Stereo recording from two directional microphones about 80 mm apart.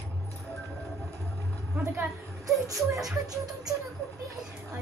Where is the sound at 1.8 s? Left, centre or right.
Right.